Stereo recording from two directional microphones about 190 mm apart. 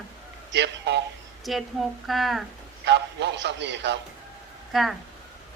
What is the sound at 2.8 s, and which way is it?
A man's voice, 65° right (ahead or behind).